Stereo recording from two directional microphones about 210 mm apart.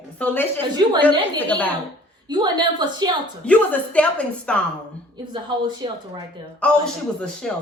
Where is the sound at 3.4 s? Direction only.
5° left (ahead or behind).